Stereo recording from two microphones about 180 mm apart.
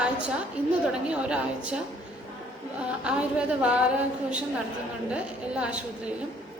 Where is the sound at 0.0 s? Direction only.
5° right (ahead or behind).